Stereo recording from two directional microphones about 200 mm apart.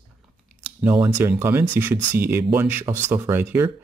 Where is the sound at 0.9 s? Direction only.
15° right (ahead or behind).